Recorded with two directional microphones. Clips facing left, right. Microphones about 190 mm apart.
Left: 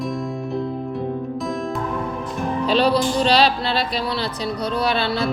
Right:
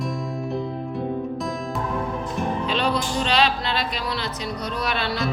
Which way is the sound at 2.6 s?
35° left (ahead or behind).